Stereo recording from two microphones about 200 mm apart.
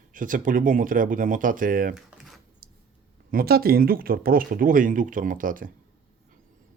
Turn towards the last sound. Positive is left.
turn(degrees=-45)  # may be behind; listen again after turning